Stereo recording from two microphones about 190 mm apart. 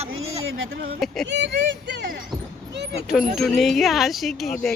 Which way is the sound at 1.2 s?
70° right (ahead or behind).